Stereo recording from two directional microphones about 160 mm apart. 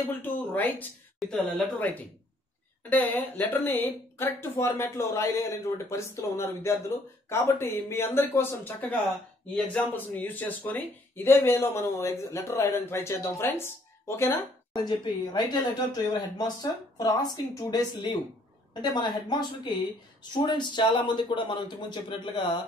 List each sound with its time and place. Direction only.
0.2 s speech: 10° left (ahead or behind); by 22.6 s 30° left (ahead or behind)